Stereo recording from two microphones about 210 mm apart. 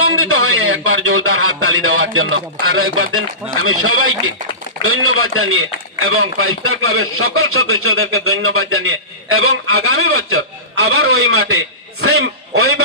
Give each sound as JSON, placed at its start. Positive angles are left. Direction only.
{"t": 0.0, "sound": "a man's voice", "side_deg": -80}